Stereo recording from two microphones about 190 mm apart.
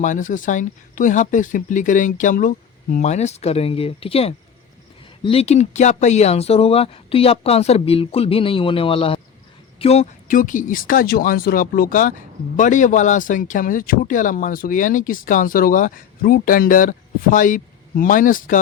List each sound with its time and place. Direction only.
0.0 s speech: 40° left (ahead or behind)